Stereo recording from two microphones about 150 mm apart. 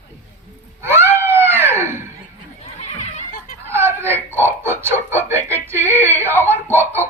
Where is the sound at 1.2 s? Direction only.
15° right (ahead or behind).